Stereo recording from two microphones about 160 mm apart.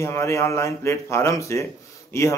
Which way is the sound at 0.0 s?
20° left (ahead or behind).